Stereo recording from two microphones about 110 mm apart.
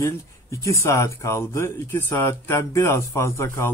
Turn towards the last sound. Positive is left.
turn(degrees=25)  # may be behind; listen again after turning